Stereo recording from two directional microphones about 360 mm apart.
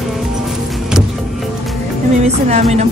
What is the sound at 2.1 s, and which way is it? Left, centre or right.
Music, centre.